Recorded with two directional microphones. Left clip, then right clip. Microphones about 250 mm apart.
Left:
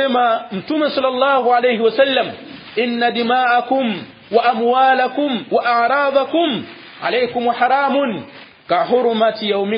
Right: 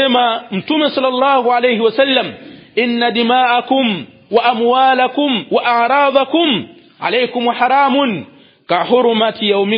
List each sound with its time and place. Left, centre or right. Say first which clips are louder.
0.0 s a man's voice: right 2 dB; right